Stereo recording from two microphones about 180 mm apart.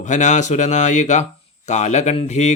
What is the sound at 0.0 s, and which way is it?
Speech, 40° left (ahead or behind).